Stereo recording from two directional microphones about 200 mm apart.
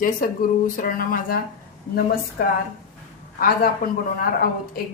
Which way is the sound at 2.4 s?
50° left (ahead or behind).